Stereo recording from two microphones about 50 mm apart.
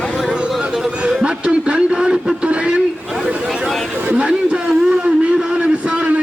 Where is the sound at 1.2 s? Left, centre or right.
Right.